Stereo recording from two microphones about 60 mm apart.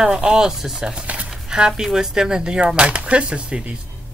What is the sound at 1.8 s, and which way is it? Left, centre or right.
Speech, centre.